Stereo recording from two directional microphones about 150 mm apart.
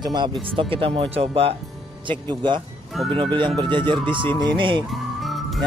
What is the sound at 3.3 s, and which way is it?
Speech, 30° right (ahead or behind).